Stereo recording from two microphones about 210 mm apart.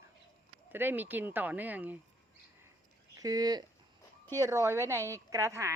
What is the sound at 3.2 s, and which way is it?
Speech, 15° right (ahead or behind).